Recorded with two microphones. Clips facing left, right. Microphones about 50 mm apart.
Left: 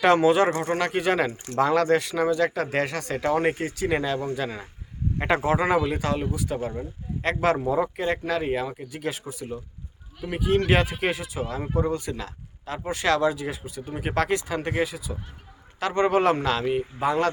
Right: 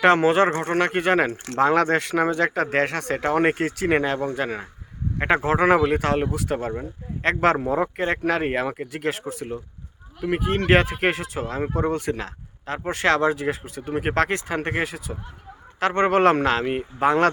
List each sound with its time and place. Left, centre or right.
0.0 s speech: right
3.9 s speech: right
6.7 s speech: right
10.2 s speech: right